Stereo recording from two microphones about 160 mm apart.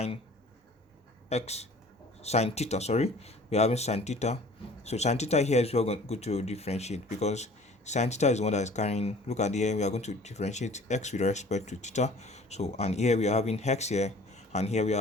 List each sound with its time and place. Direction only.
1.3 s speech: 40° left (ahead or behind)